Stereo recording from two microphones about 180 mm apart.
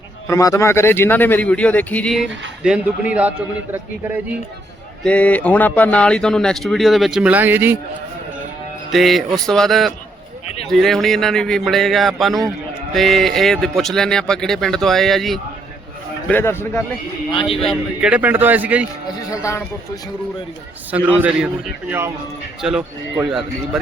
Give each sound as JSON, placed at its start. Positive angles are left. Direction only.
{"t": 0.3, "sound": "a man's voice", "side_deg": 15}
{"t": 2.6, "sound": "a man's voice", "side_deg": -5}
{"t": 5.0, "sound": "speech", "side_deg": 10}
{"t": 8.9, "sound": "speech", "side_deg": 0}
{"t": 16.3, "sound": "a man's voice", "side_deg": 15}
{"t": 17.3, "sound": "a man's voice", "side_deg": 30}
{"t": 17.6, "sound": "a man's voice", "side_deg": 0}
{"t": 19.3, "sound": "a man's voice", "side_deg": 15}
{"t": 21.2, "sound": "a man's voice", "side_deg": -5}